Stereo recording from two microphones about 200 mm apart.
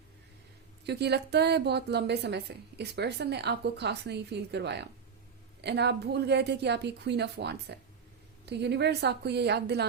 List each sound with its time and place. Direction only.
0.9 s a woman's voice: 55° right (ahead or behind)